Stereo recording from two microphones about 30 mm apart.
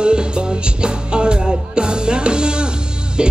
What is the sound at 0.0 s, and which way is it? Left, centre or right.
Music, right.